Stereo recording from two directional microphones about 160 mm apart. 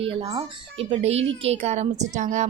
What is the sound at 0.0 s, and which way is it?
A child's voice, 35° right (ahead or behind).